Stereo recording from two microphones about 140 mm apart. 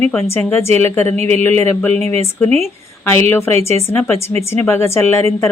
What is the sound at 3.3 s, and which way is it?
A woman's voice, 15° left (ahead or behind).